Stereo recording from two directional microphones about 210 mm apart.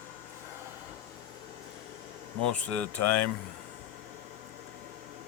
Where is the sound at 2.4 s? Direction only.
5° left (ahead or behind).